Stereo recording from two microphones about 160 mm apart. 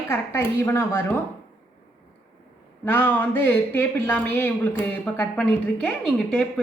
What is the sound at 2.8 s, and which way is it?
A woman's voice, 15° left (ahead or behind).